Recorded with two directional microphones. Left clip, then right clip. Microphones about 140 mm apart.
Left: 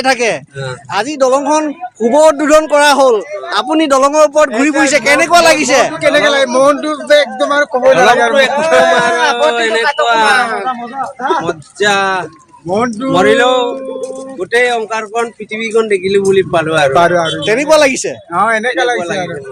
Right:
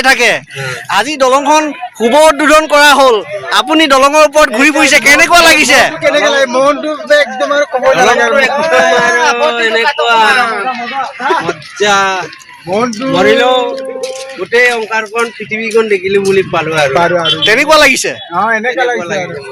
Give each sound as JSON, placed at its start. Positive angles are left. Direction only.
{"t": 0.0, "sound": "a man's voice", "side_deg": 0}
{"t": 6.0, "sound": "a man's voice", "side_deg": 35}
{"t": 11.8, "sound": "a man's voice", "side_deg": 40}
{"t": 13.1, "sound": "a man's voice", "side_deg": 35}
{"t": 14.5, "sound": "speech", "side_deg": 50}
{"t": 16.9, "sound": "speech", "side_deg": 25}
{"t": 17.4, "sound": "a man's voice", "side_deg": 5}
{"t": 18.3, "sound": "speech", "side_deg": 20}